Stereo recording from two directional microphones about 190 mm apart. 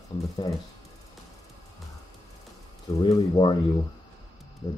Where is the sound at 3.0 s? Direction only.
25° left (ahead or behind).